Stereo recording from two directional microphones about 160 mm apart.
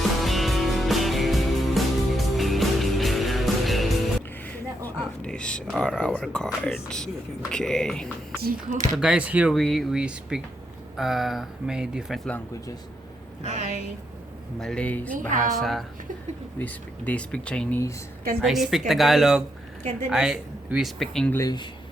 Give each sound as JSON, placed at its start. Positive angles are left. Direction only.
{"t": 0.2, "sound": "music", "side_deg": 0}
{"t": 4.4, "sound": "a sound", "side_deg": 10}
{"t": 7.5, "sound": "speech", "side_deg": 5}
{"t": 13.4, "sound": "a woman's voice", "side_deg": -45}
{"t": 14.6, "sound": "speech", "side_deg": 5}
{"t": 21.3, "sound": "speech", "side_deg": 25}